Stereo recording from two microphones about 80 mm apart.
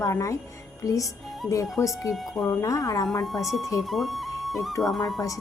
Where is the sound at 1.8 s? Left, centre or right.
Left.